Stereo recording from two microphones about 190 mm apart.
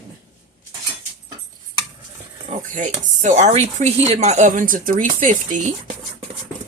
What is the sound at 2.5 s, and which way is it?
Speech, 40° right (ahead or behind).